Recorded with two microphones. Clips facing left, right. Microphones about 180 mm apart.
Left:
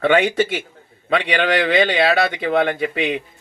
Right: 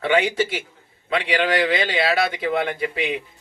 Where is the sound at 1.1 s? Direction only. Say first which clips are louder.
Left 2 dB; 65° left (ahead or behind).